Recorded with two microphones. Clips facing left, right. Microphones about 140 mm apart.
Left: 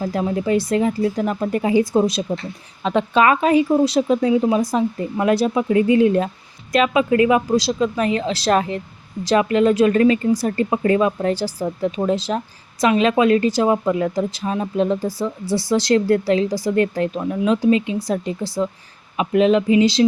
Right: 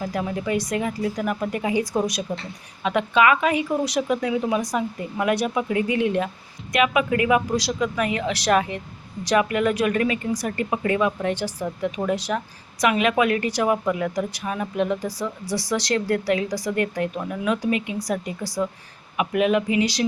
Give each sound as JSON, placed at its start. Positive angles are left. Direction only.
{"t": 0.0, "sound": "a woman's voice", "side_deg": 30}